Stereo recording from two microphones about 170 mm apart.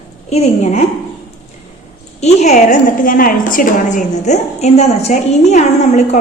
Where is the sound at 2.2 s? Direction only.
45° left (ahead or behind).